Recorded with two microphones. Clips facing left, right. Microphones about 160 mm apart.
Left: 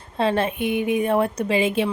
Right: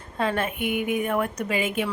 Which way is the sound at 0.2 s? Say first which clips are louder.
Left 4 dB; 30° left (ahead or behind).